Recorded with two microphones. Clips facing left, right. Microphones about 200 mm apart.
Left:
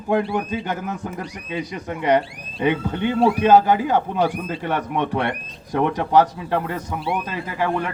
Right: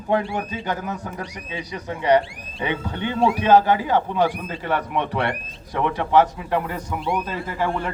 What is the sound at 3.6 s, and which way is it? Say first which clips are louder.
Speech: left 1 dB; 50° left (ahead or behind).